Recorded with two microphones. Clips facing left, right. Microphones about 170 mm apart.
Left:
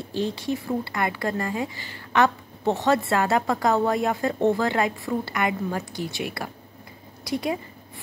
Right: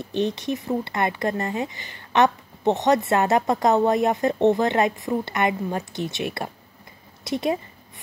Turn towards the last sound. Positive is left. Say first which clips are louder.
# right 2 dB
turn(degrees=-25)  # may be behind; listen again after turning